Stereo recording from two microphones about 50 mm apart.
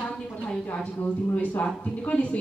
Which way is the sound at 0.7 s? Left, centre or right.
Left.